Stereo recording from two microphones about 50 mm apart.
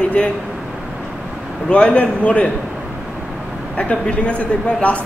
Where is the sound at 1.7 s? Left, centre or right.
Left.